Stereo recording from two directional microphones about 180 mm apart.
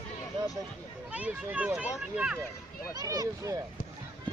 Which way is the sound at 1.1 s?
5° right (ahead or behind).